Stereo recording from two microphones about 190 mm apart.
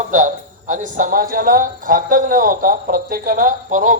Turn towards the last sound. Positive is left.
turn(degrees=-45)  # may be behind; listen again after turning